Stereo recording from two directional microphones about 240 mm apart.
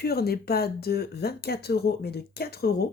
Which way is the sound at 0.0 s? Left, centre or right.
Left.